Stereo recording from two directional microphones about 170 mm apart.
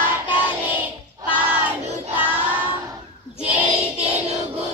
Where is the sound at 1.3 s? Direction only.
10° right (ahead or behind).